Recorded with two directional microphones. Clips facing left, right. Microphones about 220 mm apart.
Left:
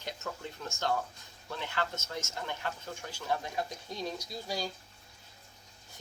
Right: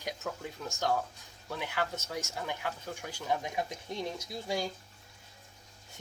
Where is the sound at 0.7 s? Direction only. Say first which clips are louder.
Right 1 dB; 15° right (ahead or behind).